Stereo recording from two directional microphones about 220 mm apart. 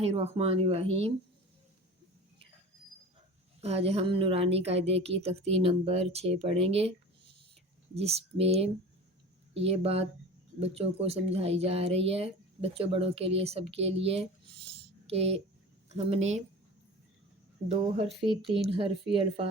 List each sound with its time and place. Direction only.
0.0 s speech: 30° right (ahead or behind)
3.6 s speech: 25° right (ahead or behind)
7.9 s speech: 30° right (ahead or behind)
17.7 s speech: 25° right (ahead or behind)
19.1 s speech: 25° right (ahead or behind)